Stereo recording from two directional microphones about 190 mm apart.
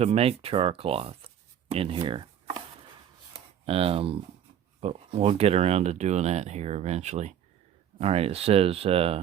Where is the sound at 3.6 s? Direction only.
30° right (ahead or behind).